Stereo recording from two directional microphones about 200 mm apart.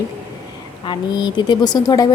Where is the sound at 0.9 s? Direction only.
20° left (ahead or behind).